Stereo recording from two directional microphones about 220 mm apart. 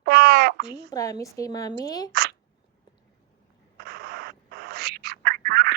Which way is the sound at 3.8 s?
45° right (ahead or behind).